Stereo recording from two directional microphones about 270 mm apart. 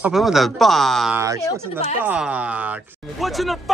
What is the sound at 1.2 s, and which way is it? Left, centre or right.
Speech, centre.